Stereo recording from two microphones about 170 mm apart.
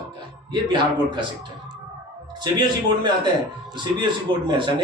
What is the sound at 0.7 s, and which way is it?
Speech, 25° right (ahead or behind).